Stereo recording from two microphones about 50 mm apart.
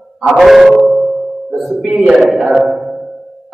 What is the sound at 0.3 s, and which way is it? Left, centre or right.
Speech, centre.